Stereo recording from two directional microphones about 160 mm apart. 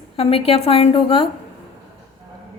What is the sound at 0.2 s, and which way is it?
A woman's voice, 35° left (ahead or behind).